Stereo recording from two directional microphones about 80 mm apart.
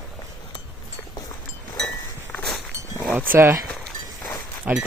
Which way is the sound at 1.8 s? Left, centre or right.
Left.